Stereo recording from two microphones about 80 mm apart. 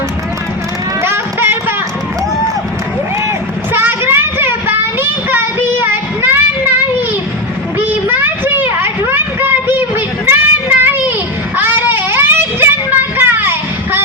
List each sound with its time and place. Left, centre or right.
1.0 s music: right
3.7 s a sound: right
5.8 s child singing: right
7.8 s vehicle: right
10.2 s a sound: right
11.5 s vehicle: right